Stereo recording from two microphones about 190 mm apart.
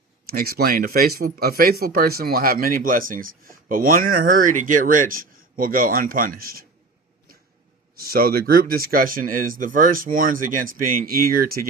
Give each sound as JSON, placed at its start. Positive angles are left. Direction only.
{"t": 0.3, "sound": "speech", "side_deg": -50}
{"t": 7.9, "sound": "speech", "side_deg": -50}